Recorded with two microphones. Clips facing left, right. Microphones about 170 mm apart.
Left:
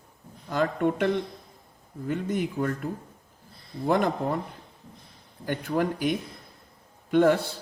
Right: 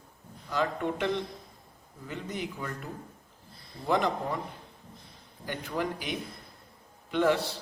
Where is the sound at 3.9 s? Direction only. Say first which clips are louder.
Left 3 dB; 50° left (ahead or behind).